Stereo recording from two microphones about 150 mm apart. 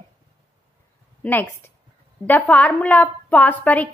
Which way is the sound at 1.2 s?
15° left (ahead or behind).